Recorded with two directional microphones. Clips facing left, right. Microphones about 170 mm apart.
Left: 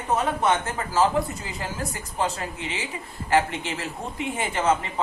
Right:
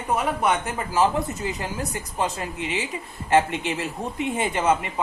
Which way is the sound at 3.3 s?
20° right (ahead or behind).